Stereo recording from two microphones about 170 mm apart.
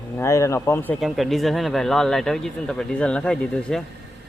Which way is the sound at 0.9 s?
Centre (ahead or behind).